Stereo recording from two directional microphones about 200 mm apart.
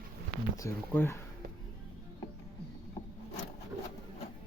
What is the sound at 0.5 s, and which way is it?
Speech, 15° left (ahead or behind).